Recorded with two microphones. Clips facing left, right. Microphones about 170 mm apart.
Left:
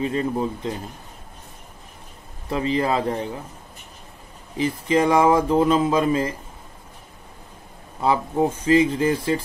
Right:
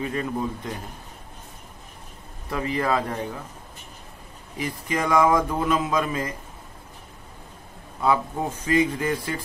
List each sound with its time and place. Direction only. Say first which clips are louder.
0.0 s speech: left 4 dB; 20° left (ahead or behind)
2.5 s speech: left 3 dB; 25° left (ahead or behind)
4.6 s speech: left 7 dB; 25° left (ahead or behind)
8.0 s speech: left 3 dB; 25° left (ahead or behind)